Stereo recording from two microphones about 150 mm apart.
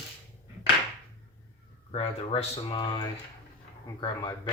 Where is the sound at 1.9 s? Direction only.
40° left (ahead or behind).